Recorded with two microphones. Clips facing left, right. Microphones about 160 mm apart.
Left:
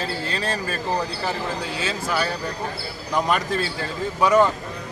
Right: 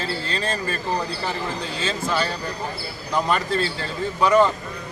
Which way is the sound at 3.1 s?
15° left (ahead or behind).